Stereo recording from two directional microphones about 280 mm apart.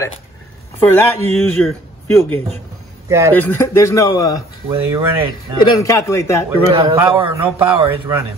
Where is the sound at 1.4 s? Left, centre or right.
Centre.